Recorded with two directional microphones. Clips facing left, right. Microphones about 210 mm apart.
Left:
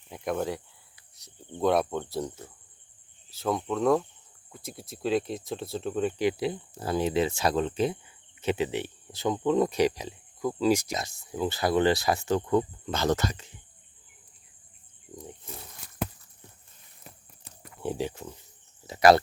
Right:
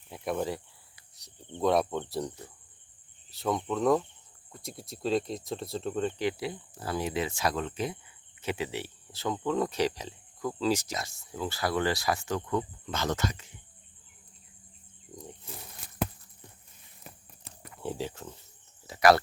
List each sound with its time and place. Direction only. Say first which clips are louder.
0.1 s speech: left 2 dB; centre (ahead or behind); by 13.5 s 35° left (ahead or behind)
15.1 s wild animals: left 2 dB; centre (ahead or behind)
17.8 s speech: left 4 dB; 15° left (ahead or behind)
18.9 s speech: left 3 dB; 25° left (ahead or behind)